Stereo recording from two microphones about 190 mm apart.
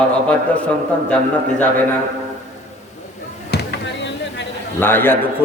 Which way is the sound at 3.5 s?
65° left (ahead or behind).